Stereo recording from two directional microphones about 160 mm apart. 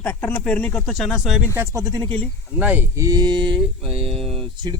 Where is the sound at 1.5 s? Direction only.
20° right (ahead or behind).